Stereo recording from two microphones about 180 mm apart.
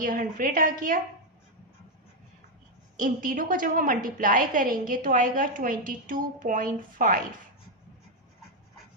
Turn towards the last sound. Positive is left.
turn(degrees=-45)  # may be behind; listen again after turning